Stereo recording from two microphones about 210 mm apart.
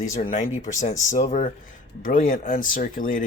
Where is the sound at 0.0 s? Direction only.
35° left (ahead or behind).